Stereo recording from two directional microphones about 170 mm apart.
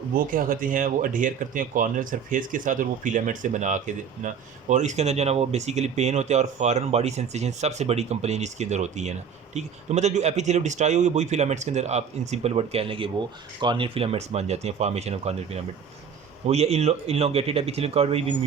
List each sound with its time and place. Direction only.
0.1 s speech: 55° right (ahead or behind); by 18.3 s 35° right (ahead or behind)